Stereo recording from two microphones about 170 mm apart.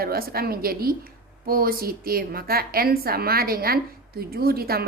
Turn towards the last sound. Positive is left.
turn(degrees=-65)  # may be behind; listen again after turning